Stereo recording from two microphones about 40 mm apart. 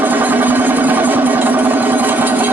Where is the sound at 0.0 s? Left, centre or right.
Right.